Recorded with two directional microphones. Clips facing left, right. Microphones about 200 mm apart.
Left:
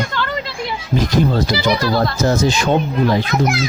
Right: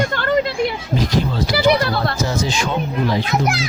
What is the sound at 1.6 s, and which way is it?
Speech, 60° right (ahead or behind).